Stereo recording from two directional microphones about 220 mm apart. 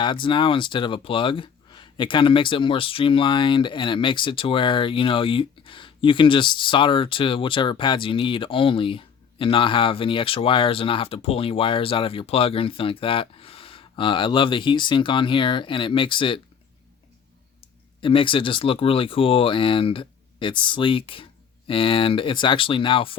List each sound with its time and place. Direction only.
0.0 s speech: 20° left (ahead or behind)
17.6 s speech: 25° left (ahead or behind)